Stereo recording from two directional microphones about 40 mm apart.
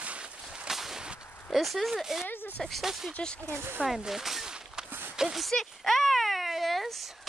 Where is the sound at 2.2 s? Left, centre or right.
Left.